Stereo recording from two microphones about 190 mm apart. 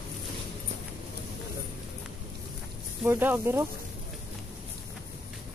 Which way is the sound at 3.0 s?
10° right (ahead or behind).